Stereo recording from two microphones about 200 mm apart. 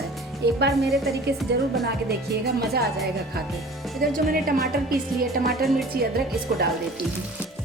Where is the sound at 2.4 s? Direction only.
55° right (ahead or behind).